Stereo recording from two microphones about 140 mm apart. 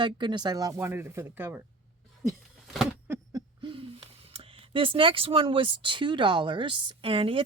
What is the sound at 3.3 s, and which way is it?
Speech, 30° right (ahead or behind).